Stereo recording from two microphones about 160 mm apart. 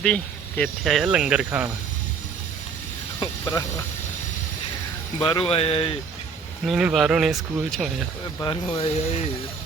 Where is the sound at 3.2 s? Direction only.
25° left (ahead or behind).